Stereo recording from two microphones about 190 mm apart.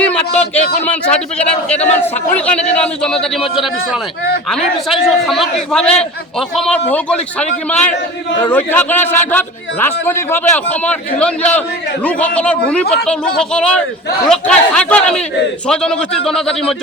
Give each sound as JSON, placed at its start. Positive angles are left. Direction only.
{"t": 0.0, "sound": "a man's voice", "side_deg": 5}